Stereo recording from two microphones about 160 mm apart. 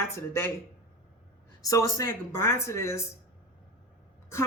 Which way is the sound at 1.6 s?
20° left (ahead or behind).